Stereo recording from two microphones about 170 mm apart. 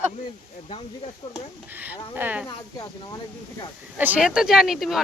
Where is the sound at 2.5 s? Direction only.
25° left (ahead or behind).